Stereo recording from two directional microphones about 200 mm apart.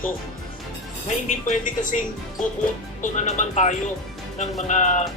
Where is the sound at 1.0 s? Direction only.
40° left (ahead or behind).